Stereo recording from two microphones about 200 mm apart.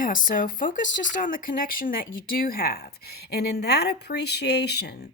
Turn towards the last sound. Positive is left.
turn(degrees=55)  # may be behind; listen again after turning